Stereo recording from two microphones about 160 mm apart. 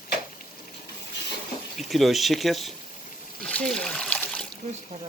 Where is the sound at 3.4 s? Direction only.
5° left (ahead or behind).